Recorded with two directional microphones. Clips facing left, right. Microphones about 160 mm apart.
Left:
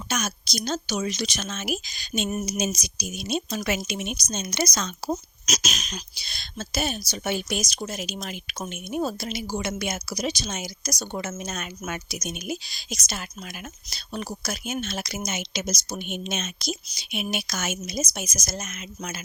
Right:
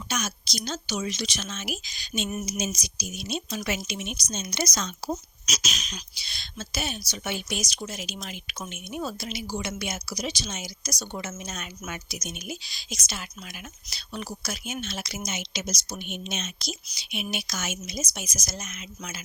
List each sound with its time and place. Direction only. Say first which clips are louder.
0.1 s speech: left 3 dB; 45° left (ahead or behind)
5.0 s speech: left 3 dB; 45° left (ahead or behind)